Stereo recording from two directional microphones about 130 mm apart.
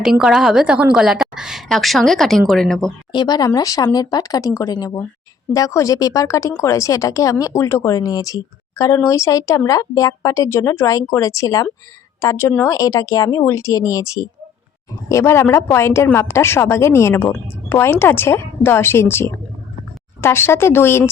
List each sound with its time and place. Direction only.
0.0 s a woman's voice: 5° right (ahead or behind)
3.1 s speech: 35° left (ahead or behind); by 21.0 s 20° left (ahead or behind)